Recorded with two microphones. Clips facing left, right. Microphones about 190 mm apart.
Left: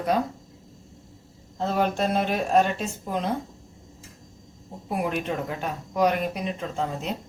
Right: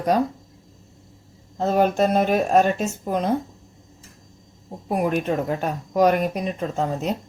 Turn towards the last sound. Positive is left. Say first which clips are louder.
# right 5 dB
turn(degrees=-45)  # may be behind; listen again after turning